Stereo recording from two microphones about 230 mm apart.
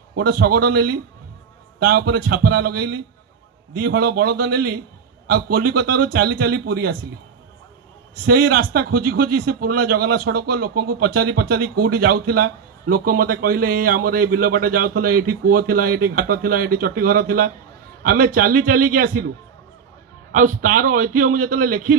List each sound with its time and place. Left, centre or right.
0.3 s a man's voice: right
8.3 s a man's voice: right
20.3 s a man's voice: right